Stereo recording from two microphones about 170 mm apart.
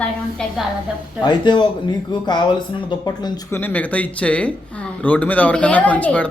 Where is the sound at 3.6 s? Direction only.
10° left (ahead or behind).